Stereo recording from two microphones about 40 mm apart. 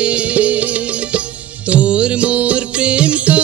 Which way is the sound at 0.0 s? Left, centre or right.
Right.